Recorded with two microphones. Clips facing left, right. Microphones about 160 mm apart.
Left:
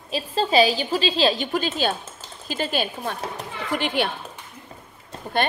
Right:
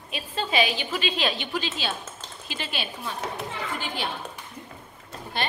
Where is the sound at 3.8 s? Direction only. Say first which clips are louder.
Left 9 dB; 70° left (ahead or behind).